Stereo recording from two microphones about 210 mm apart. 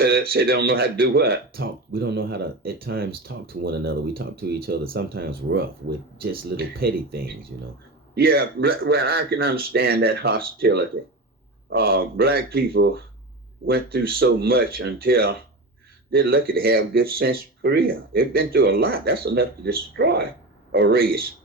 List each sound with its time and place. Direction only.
0.0 s speech: 45° right (ahead or behind)